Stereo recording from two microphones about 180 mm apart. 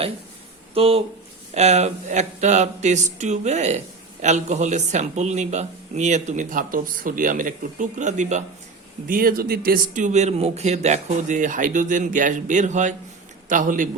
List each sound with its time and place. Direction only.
0.7 s speech: 30° right (ahead or behind)
9.0 s speech: 55° right (ahead or behind)